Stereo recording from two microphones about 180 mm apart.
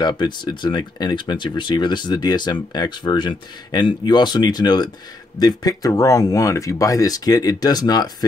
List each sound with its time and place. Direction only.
0.0 s speech: 25° left (ahead or behind)